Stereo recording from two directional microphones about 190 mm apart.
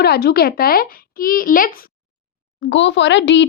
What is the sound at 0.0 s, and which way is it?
Speech, 55° left (ahead or behind).